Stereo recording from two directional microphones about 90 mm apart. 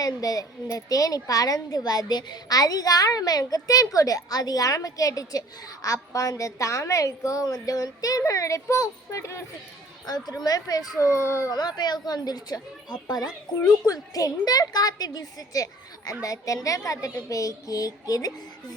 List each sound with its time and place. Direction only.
0.0 s a woman's voice: 45° left (ahead or behind)
10.1 s a woman's voice: 50° left (ahead or behind); by 11.5 s 30° left (ahead or behind)
11.5 s a woman's voice: 50° left (ahead or behind)